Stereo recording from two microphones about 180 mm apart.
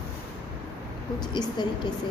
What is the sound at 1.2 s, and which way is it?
Speech, 25° left (ahead or behind).